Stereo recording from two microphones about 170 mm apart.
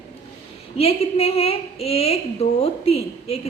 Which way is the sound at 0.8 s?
35° left (ahead or behind).